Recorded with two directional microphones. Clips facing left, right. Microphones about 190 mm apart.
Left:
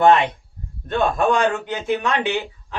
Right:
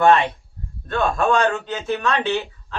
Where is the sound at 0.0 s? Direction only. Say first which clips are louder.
Left 1 dB; 15° left (ahead or behind).